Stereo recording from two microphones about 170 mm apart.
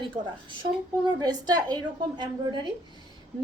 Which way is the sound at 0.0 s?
30° right (ahead or behind).